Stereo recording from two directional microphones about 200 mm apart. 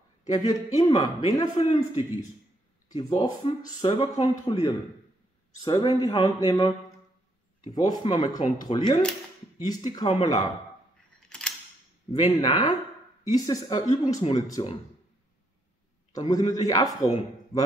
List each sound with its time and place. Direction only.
0.3 s speech: 20° left (ahead or behind)
7.7 s speech: 20° left (ahead or behind)
11.2 s typewriter: 5° left (ahead or behind)
12.1 s speech: 25° left (ahead or behind)
16.1 s a man's voice: 20° left (ahead or behind)